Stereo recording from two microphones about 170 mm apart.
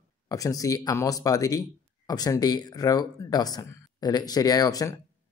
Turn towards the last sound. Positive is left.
turn(degrees=20)  # may be behind; listen again after turning